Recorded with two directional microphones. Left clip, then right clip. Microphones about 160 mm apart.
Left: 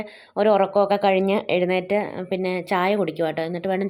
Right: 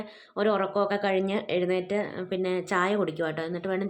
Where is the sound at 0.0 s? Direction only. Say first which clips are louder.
Left 7 dB; 20° left (ahead or behind).